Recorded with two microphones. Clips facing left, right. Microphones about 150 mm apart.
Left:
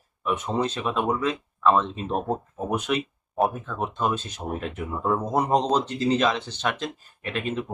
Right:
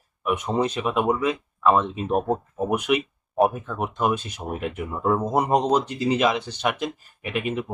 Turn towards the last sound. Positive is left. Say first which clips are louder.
# right 2 dB
turn(degrees=-15)  # may be behind; listen again after turning